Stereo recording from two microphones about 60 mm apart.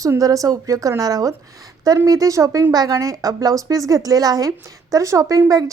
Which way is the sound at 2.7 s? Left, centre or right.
Right.